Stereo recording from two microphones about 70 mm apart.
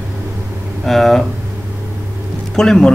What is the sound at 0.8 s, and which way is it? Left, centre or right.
Speech, centre.